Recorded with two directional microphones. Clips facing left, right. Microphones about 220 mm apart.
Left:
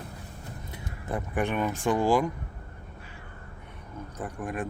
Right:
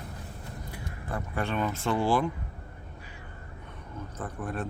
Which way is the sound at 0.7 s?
20° left (ahead or behind).